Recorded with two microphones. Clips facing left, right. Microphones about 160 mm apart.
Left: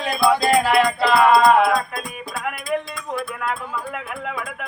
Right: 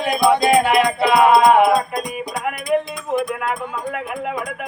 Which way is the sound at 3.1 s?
15° right (ahead or behind).